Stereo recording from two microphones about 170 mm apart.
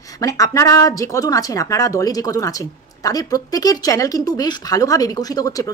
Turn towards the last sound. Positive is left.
turn(degrees=20)  # may be behind; listen again after turning